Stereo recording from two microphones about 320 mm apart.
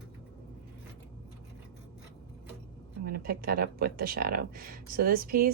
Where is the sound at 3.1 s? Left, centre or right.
Right.